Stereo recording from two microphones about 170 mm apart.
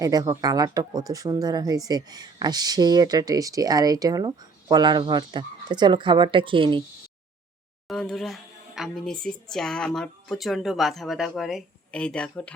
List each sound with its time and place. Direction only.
0.0 s speech: 20° right (ahead or behind)
7.9 s speech: centre (ahead or behind)